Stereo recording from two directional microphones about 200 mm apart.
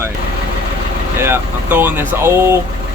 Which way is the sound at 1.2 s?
10° right (ahead or behind).